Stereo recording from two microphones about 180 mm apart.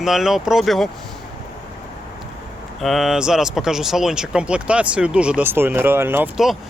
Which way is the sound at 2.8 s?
Centre (ahead or behind).